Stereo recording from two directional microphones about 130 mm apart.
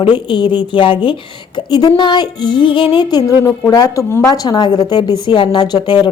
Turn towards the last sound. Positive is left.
turn(degrees=35)  # may be behind; listen again after turning